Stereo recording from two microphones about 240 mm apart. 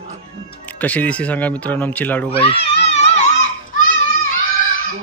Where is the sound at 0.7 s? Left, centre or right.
Centre.